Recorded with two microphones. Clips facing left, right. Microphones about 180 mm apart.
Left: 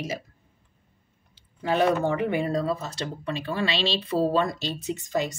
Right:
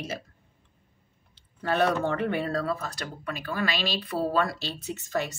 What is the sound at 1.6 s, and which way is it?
A woman's voice, 10° left (ahead or behind).